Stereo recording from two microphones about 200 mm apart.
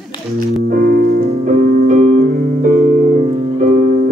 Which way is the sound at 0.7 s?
50° right (ahead or behind).